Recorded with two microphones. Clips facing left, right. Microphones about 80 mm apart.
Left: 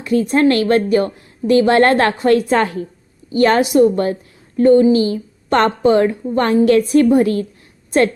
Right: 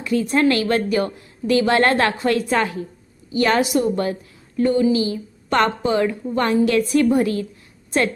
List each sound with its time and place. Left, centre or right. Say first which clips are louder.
0.0 s a woman's voice: left 4 dB; left